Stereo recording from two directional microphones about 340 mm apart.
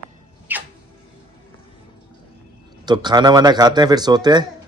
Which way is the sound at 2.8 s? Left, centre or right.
Centre.